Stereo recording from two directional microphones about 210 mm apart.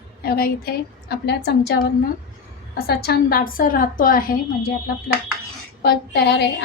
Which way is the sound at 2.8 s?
50° left (ahead or behind).